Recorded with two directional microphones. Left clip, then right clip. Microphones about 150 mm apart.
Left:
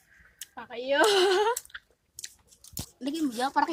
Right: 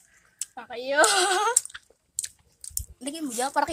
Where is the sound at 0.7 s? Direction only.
30° right (ahead or behind).